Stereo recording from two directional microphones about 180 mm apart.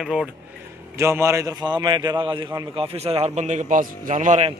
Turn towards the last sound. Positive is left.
turn(degrees=-40)  # may be behind; listen again after turning